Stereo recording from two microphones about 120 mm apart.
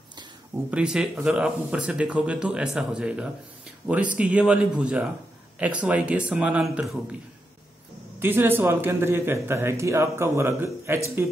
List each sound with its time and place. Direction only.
0.7 s speech: 5° right (ahead or behind)
8.2 s a man's voice: 15° right (ahead or behind)